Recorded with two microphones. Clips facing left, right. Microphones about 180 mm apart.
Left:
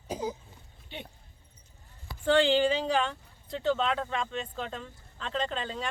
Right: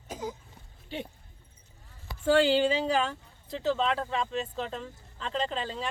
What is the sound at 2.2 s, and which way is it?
Speech, 5° right (ahead or behind).